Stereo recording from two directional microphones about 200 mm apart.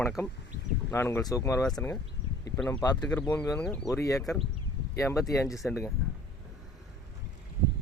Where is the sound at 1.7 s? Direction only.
5° left (ahead or behind).